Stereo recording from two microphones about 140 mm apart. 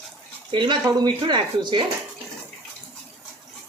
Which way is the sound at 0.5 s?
35° right (ahead or behind).